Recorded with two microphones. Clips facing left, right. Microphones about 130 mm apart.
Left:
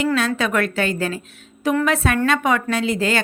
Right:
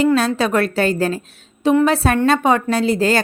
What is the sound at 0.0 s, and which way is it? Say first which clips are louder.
A woman's voice: right 4 dB; 35° right (ahead or behind).